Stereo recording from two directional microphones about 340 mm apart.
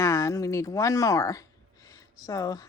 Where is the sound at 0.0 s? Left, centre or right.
Centre.